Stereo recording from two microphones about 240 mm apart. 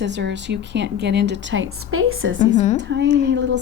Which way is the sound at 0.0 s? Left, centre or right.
Right.